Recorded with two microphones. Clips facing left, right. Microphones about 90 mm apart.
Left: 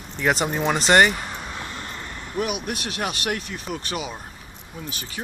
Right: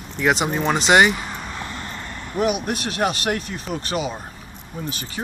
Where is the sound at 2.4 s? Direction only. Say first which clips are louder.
Right 5 dB; 35° right (ahead or behind).